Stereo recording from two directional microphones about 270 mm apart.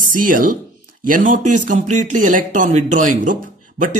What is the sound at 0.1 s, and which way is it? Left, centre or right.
A woman's voice, right.